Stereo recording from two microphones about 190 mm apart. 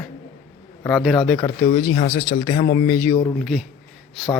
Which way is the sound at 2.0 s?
25° left (ahead or behind).